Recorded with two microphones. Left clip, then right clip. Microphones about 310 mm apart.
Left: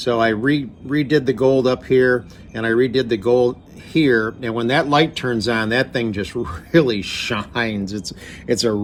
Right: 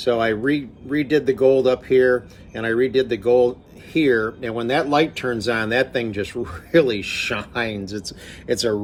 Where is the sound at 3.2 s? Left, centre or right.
Left.